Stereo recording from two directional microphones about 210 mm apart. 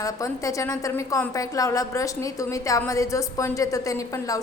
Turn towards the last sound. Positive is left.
turn(degrees=15)  # may be behind; listen again after turning